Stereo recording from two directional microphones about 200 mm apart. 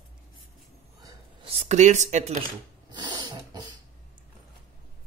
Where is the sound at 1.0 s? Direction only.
20° right (ahead or behind).